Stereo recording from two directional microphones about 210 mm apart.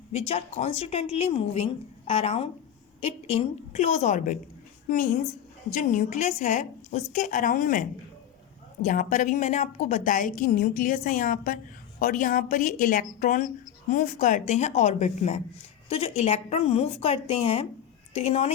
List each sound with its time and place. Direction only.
0.1 s a woman's voice: 30° left (ahead or behind)